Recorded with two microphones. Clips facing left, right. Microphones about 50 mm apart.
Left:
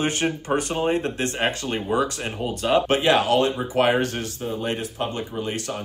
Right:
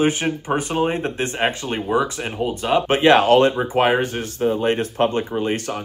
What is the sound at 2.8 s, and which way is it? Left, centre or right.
Speech, right.